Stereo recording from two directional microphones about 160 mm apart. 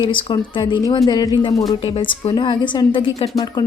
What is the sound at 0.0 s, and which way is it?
A woman's voice, 30° left (ahead or behind).